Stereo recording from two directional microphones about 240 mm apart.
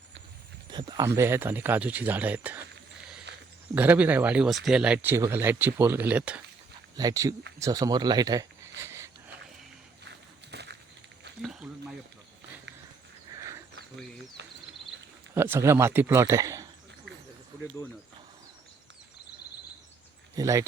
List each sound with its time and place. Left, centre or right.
0.7 s speech: centre
3.3 s a sound: right
3.8 s speech: centre
10.5 s crushing: right
13.3 s a sound: centre
14.4 s cricket: right
15.4 s speech: centre
20.3 s speech: centre